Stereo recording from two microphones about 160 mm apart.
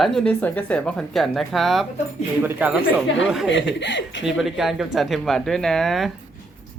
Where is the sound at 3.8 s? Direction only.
90° left.